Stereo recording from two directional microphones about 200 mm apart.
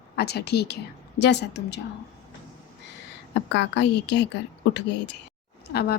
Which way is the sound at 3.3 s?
60° left (ahead or behind).